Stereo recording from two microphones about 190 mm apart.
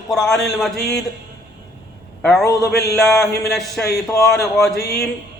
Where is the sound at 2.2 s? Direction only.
Centre (ahead or behind).